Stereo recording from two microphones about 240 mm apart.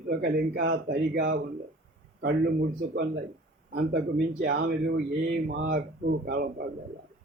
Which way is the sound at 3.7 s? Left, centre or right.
Right.